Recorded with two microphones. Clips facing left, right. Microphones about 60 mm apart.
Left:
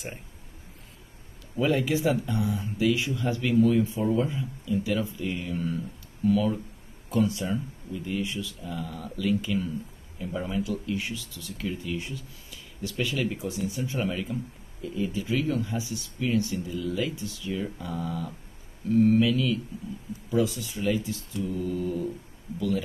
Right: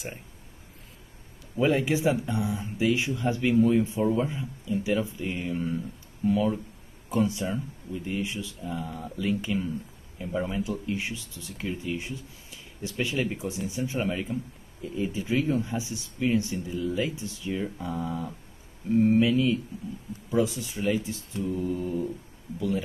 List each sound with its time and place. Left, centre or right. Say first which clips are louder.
1.6 s speech: right 1 dB; right
4.0 s speech: even; centre
4.3 s speech: left 1 dB; right